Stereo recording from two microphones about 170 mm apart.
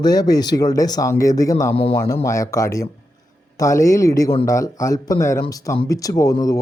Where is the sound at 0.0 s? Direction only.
20° left (ahead or behind).